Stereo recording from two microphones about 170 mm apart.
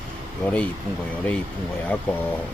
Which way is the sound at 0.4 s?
5° left (ahead or behind).